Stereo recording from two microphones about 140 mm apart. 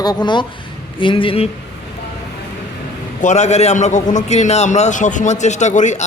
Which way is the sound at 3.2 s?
60° left (ahead or behind).